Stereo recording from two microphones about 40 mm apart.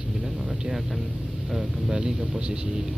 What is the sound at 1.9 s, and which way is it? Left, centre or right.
Speech, centre.